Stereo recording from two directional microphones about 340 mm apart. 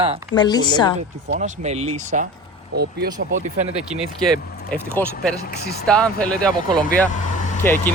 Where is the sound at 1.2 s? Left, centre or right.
Right.